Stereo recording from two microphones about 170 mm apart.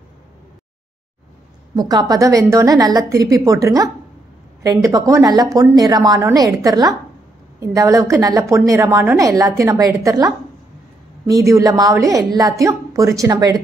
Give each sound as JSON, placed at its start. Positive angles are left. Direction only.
{"t": 1.8, "sound": "a woman's voice", "side_deg": -25}